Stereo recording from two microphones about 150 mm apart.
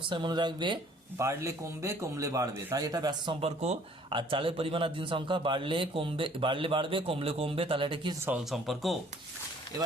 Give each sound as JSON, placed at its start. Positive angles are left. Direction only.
{"t": 0.0, "sound": "a man's voice", "side_deg": -30}
{"t": 1.2, "sound": "a man's voice", "side_deg": -20}
{"t": 3.4, "sound": "speech", "side_deg": -45}
{"t": 4.1, "sound": "a man's voice", "side_deg": -35}
{"t": 8.4, "sound": "speech", "side_deg": 0}